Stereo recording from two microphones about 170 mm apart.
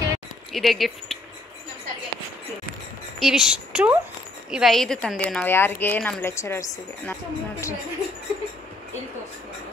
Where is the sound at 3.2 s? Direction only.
5° right (ahead or behind).